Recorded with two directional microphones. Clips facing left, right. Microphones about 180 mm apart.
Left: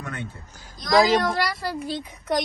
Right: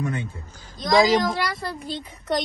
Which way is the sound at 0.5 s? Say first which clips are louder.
Right 1 dB; 10° left (ahead or behind).